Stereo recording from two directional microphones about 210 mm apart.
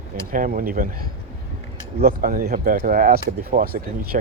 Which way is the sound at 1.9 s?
45° right (ahead or behind).